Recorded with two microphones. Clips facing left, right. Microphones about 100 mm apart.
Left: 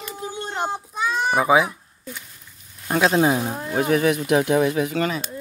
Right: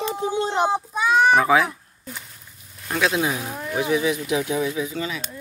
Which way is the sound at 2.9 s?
35° left (ahead or behind).